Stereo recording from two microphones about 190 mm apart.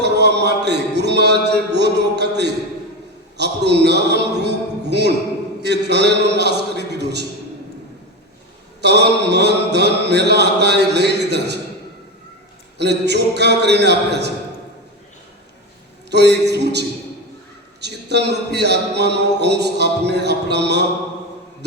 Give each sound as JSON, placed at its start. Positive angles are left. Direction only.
{"t": 0.0, "sound": "a sound", "side_deg": -60}
{"t": 3.3, "sound": "a man's voice", "side_deg": -60}
{"t": 8.8, "sound": "a man's voice", "side_deg": -60}
{"t": 12.8, "sound": "a man's voice", "side_deg": -60}
{"t": 16.0, "sound": "a man's voice", "side_deg": -60}